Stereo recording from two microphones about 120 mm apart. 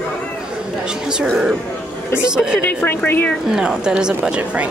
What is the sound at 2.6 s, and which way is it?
Speech, 15° left (ahead or behind).